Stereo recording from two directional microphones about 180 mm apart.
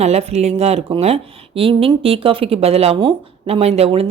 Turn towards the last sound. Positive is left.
turn(degrees=-35)  # may be behind; listen again after turning